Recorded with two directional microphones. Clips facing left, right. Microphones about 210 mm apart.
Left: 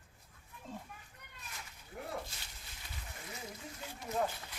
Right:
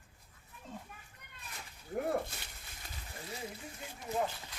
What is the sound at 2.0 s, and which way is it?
Speech, 55° right (ahead or behind).